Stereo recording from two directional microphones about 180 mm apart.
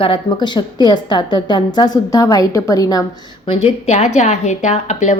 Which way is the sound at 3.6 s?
40° left (ahead or behind).